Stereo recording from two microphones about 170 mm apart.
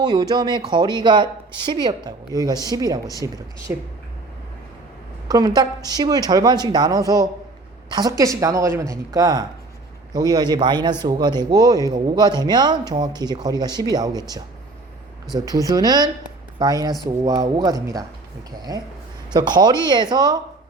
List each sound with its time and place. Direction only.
0.0 s a man's voice: 25° right (ahead or behind)
5.3 s a man's voice: 20° right (ahead or behind)
19.3 s a man's voice: 25° right (ahead or behind)